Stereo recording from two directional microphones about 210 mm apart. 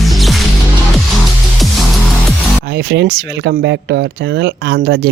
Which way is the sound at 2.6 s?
50° right (ahead or behind).